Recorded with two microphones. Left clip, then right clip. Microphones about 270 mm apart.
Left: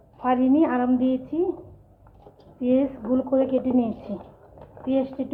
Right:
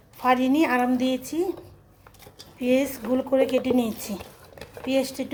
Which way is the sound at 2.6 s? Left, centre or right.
Right.